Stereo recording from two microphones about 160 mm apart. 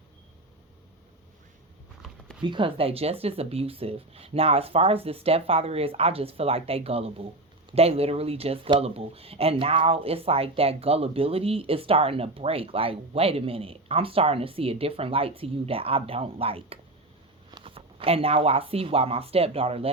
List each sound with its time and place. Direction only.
2.4 s speech: 30° right (ahead or behind)